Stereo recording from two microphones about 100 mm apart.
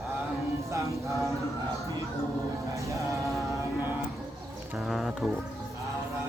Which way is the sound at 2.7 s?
30° right (ahead or behind).